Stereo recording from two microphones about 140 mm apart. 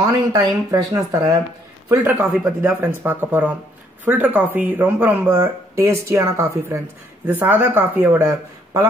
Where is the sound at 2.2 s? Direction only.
Centre (ahead or behind).